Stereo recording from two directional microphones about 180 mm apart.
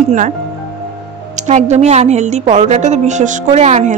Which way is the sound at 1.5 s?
40° right (ahead or behind).